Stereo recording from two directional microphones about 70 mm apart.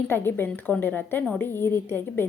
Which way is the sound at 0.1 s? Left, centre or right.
Left.